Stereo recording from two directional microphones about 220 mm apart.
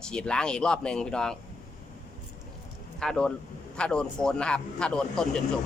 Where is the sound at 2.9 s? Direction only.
5° left (ahead or behind).